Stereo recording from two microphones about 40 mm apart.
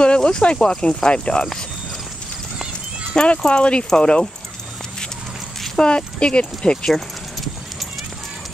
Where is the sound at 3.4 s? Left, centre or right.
Left.